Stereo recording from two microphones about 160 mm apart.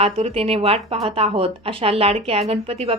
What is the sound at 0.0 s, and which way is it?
A woman's voice, 40° right (ahead or behind).